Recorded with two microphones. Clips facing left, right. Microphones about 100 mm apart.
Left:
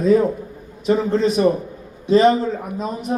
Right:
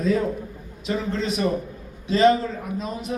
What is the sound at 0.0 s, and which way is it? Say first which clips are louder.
A man's voice: left 7 dB; 30° left (ahead or behind).